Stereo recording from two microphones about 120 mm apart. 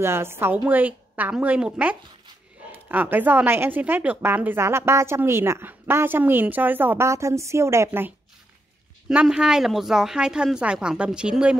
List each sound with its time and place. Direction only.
0.0 s a woman's voice: 20° right (ahead or behind)
9.1 s a woman's voice: 10° right (ahead or behind)